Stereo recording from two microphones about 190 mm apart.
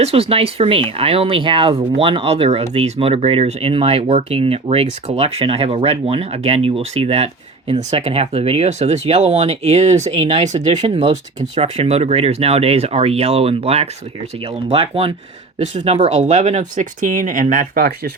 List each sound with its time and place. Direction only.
0.0 s speech: 30° right (ahead or behind); by 18.1 s 50° right (ahead or behind)